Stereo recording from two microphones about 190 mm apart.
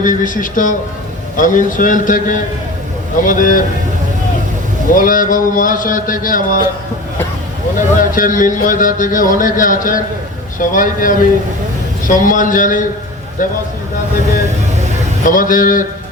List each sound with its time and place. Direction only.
0.0 s speech: 45° left (ahead or behind)
4.9 s speech: 45° left (ahead or behind)
7.9 s speech: 45° left (ahead or behind)
15.2 s speech: 45° left (ahead or behind)